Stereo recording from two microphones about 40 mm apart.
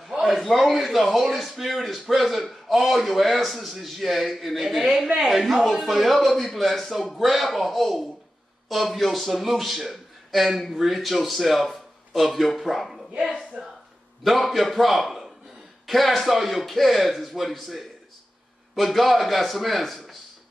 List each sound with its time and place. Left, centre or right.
0.1 s a man's voice: centre